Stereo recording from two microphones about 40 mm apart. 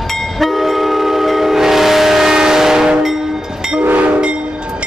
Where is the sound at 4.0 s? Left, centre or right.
Right.